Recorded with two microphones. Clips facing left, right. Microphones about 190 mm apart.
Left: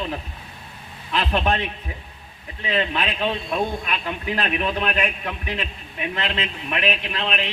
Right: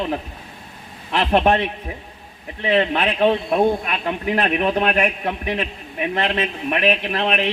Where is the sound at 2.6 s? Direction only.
65° right (ahead or behind).